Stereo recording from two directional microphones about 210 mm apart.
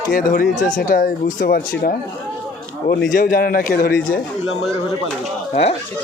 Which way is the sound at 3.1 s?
40° left (ahead or behind).